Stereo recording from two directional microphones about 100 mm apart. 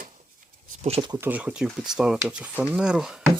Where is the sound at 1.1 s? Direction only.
15° right (ahead or behind).